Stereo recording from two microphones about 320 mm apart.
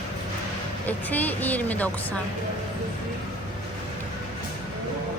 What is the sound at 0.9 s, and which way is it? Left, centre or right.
A woman's voice, centre.